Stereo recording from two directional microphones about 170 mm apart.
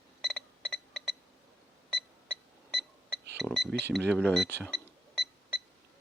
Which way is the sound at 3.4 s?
Centre (ahead or behind).